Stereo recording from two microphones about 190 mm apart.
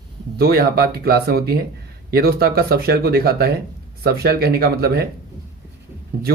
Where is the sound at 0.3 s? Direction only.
55° right (ahead or behind).